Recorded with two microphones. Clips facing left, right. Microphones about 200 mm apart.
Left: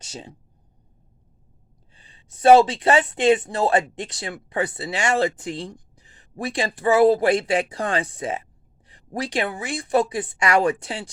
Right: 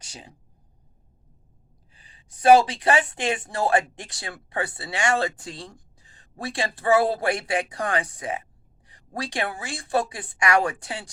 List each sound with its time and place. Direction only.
0.0 s speech: 25° left (ahead or behind)
1.9 s speech: 25° left (ahead or behind)